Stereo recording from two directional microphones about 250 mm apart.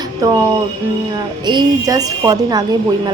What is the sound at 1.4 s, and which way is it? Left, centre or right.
A woman's voice, centre.